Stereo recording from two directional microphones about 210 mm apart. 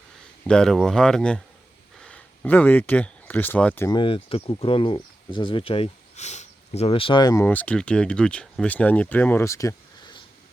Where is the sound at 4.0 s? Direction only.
25° left (ahead or behind).